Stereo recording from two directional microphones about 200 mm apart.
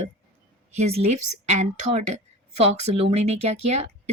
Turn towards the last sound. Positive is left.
turn(degrees=-30)  # may be behind; listen again after turning